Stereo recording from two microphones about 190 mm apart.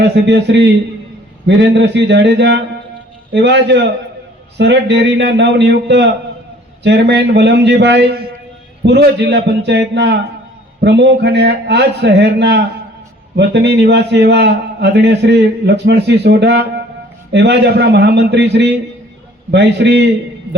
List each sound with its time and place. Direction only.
0.0 s a man's voice: 65° right (ahead or behind)